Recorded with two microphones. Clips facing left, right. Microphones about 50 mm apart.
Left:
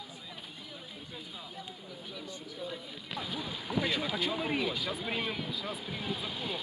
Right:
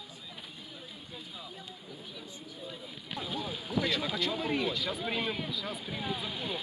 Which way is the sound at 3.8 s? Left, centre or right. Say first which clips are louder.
Right 1 dB; centre.